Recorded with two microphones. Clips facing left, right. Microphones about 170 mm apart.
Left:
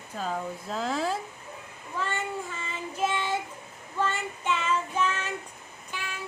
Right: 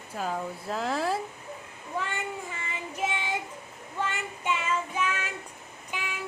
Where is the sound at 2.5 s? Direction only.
15° right (ahead or behind).